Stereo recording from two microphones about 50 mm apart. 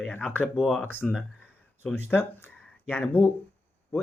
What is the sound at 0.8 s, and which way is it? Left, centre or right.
Speech, left.